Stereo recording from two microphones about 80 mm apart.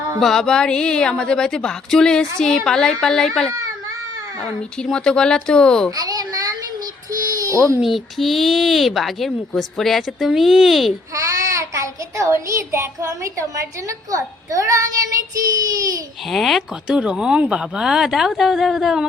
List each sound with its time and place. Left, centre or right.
0.2 s a woman's voice: centre
4.8 s a woman's voice: centre
6.0 s a sound: right
7.8 s speech: centre
11.1 s a child's voice: right
16.3 s speech: centre
17.0 s speech: centre